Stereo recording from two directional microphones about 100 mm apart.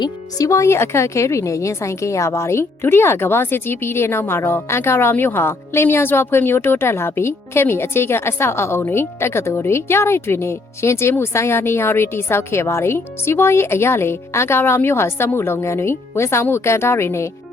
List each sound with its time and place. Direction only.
0.0 s speech: 35° left (ahead or behind)